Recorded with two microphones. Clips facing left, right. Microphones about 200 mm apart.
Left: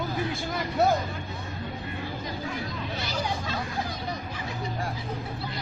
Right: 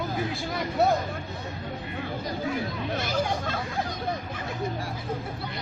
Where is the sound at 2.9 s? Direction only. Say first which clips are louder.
Right 4 dB; 50° right (ahead or behind).